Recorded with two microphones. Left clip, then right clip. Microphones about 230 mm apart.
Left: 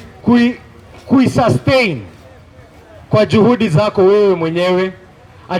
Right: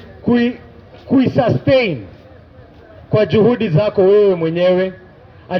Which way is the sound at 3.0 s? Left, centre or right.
Left.